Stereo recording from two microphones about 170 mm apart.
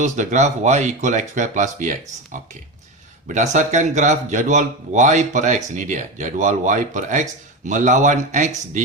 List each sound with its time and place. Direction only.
0.0 s speech: 40° right (ahead or behind)